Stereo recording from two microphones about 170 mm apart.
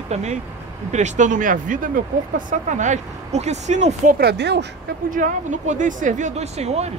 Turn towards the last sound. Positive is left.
turn(degrees=-40)  # may be behind; listen again after turning